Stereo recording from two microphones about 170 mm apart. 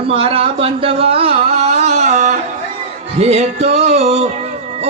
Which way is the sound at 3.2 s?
40° right (ahead or behind).